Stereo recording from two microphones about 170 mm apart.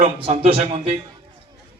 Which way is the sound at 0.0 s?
35° right (ahead or behind).